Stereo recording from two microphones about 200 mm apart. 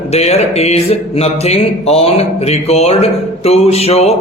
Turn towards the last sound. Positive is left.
turn(degrees=30)  # may be behind; listen again after turning